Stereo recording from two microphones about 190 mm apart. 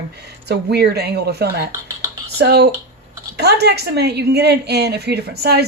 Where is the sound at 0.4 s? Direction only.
60° right (ahead or behind).